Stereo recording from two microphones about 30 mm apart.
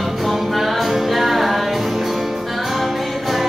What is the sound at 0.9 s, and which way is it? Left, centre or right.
Music, centre.